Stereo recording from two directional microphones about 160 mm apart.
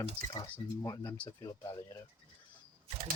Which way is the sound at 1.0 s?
15° left (ahead or behind).